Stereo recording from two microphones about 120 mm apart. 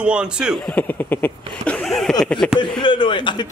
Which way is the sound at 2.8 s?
40° left (ahead or behind).